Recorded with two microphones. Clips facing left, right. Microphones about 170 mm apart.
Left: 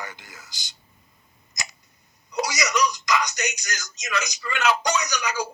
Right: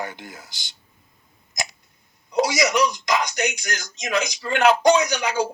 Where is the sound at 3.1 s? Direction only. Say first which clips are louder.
Right 2 dB; 55° right (ahead or behind).